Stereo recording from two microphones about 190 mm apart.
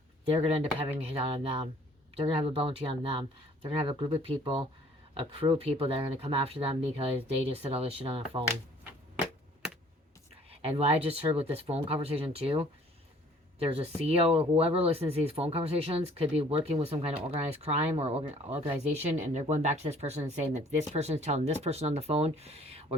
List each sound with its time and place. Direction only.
0.3 s speech: 30° right (ahead or behind)
10.5 s speech: 30° right (ahead or behind)